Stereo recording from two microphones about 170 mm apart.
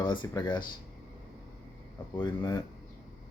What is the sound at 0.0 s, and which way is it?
Speech, 30° left (ahead or behind).